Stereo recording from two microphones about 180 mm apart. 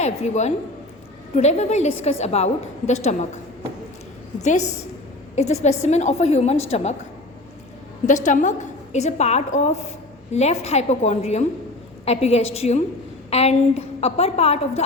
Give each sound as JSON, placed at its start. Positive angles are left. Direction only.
{"t": 0.0, "sound": "a woman's voice", "side_deg": 40}
{"t": 5.3, "sound": "a woman's voice", "side_deg": 40}
{"t": 8.0, "sound": "a woman's voice", "side_deg": 45}